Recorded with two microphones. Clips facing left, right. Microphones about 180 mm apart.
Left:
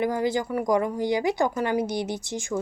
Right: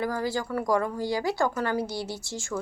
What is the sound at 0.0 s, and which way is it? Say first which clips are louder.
Speech: left 4 dB; 20° left (ahead or behind).